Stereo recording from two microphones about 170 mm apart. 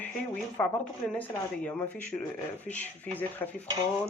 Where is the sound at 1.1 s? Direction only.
10° left (ahead or behind).